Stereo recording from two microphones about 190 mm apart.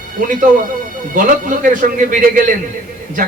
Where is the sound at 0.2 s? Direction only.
45° right (ahead or behind).